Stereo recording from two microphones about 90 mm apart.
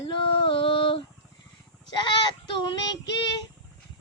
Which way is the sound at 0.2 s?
80° left.